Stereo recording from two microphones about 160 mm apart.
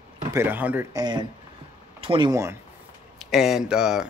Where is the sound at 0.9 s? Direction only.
25° right (ahead or behind).